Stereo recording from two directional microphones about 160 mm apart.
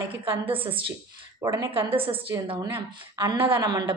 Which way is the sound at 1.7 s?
35° right (ahead or behind).